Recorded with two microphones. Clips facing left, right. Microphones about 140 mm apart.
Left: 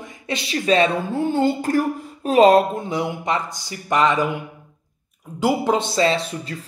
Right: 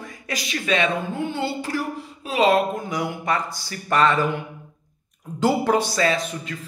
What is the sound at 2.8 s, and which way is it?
Speech, 25° left (ahead or behind).